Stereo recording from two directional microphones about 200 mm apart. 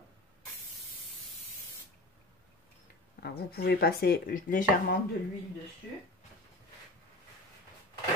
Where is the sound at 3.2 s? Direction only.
50° left (ahead or behind).